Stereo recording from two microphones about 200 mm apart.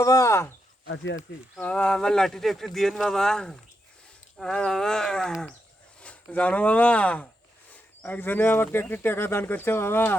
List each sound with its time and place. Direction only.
0.0 s speech: 15° left (ahead or behind)
1.5 s speech: 5° left (ahead or behind)